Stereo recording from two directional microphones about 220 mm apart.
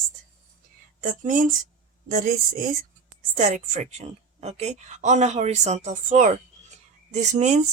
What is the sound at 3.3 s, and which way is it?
A woman's voice, 35° right (ahead or behind).